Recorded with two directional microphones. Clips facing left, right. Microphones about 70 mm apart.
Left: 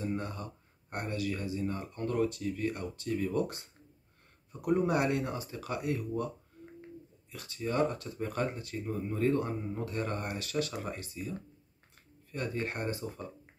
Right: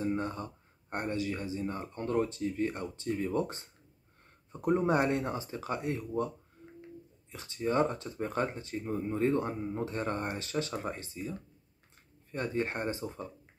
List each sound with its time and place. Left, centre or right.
0.0 s speech: right